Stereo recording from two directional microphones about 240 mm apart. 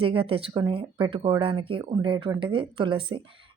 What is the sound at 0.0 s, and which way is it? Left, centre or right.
A woman's voice, right.